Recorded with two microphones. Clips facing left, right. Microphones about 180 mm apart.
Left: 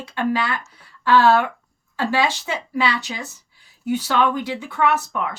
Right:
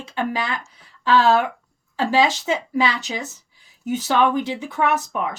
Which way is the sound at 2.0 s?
20° right (ahead or behind).